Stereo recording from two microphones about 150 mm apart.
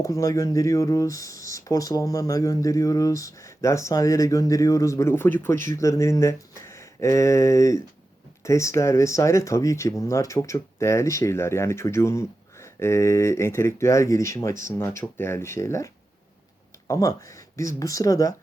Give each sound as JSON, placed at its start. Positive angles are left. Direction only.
{"t": 0.0, "sound": "speech", "side_deg": 20}
{"t": 16.9, "sound": "speech", "side_deg": 20}